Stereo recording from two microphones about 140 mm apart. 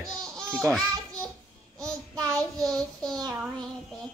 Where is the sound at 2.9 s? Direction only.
30° right (ahead or behind).